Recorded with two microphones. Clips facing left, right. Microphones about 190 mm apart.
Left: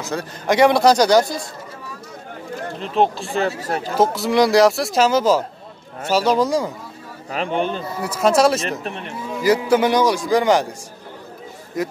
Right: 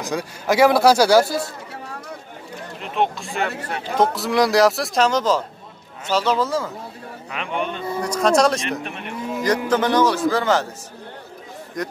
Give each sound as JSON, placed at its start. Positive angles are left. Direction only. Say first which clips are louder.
{"t": 0.0, "sound": "speech", "louder": "even", "side_deg": -10}
{"t": 2.8, "sound": "speech", "louder": "left 4 dB", "side_deg": 35}
{"t": 4.0, "sound": "a man's voice", "louder": "left 2 dB", "side_deg": 0}
{"t": 7.2, "sound": "speech", "louder": "left 5 dB", "side_deg": 35}
{"t": 8.0, "sound": "speech", "louder": "left 1 dB", "side_deg": 5}
{"t": 8.8, "sound": "speech", "louder": "left 3 dB", "side_deg": 35}
{"t": 9.4, "sound": "a man's voice", "louder": "left 4 dB", "side_deg": 10}
{"t": 11.8, "sound": "speech", "louder": "left 4 dB", "side_deg": 5}